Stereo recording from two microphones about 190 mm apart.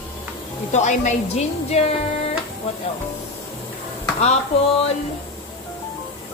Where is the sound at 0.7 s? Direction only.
40° left (ahead or behind).